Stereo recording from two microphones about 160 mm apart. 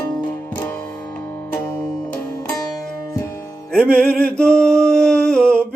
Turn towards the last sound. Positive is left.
turn(degrees=5)  # may be behind; listen again after turning